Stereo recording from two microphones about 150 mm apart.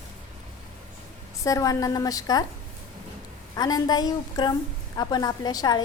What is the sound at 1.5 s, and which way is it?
Speech, 20° left (ahead or behind).